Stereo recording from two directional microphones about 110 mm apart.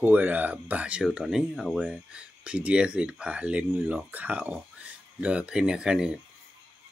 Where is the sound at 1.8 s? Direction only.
10° right (ahead or behind).